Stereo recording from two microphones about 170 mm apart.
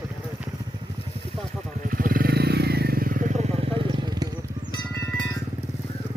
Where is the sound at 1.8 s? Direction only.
55° right (ahead or behind); by 4.2 s 25° right (ahead or behind).